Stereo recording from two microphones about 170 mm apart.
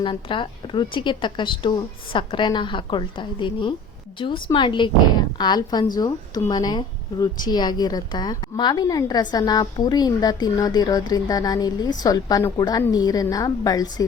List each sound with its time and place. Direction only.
0.0 s speech: 30° left (ahead or behind)